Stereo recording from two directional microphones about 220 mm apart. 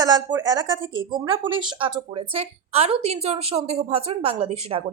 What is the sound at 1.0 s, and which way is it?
A woman's voice, 20° right (ahead or behind).